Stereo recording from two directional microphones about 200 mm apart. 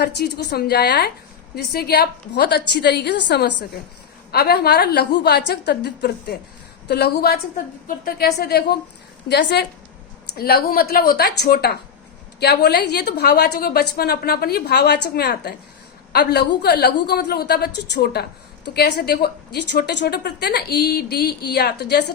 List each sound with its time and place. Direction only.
0.0 s a woman's voice: 55° left (ahead or behind)